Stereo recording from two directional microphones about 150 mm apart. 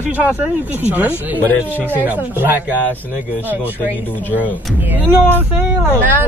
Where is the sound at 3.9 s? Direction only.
10° left (ahead or behind).